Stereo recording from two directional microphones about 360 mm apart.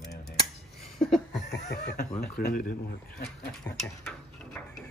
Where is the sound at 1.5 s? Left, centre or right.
Left.